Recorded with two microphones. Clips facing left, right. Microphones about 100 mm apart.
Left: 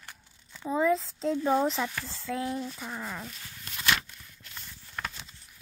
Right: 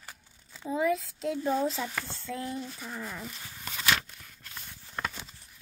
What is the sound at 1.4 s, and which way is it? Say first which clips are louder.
Speech: left 3 dB; 80° left.